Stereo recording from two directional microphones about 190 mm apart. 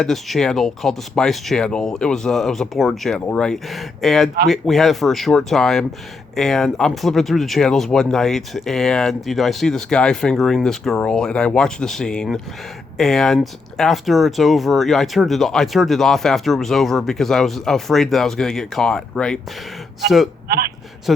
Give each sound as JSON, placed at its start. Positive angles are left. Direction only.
{"t": 0.0, "sound": "speech", "side_deg": 0}
{"t": 20.5, "sound": "a man's voice", "side_deg": -55}